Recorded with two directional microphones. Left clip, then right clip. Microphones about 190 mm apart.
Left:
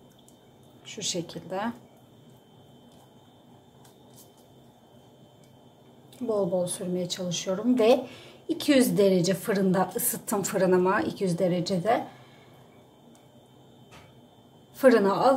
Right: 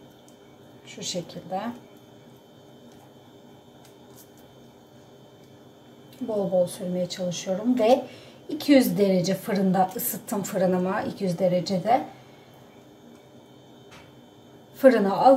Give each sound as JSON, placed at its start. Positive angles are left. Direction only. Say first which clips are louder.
{"t": 1.2, "sound": "a woman's voice", "louder": "right 1 dB", "side_deg": 40}
{"t": 6.2, "sound": "a woman's voice", "louder": "right 3 dB", "side_deg": 35}
{"t": 14.8, "sound": "a woman's voice", "louder": "right 2 dB", "side_deg": 35}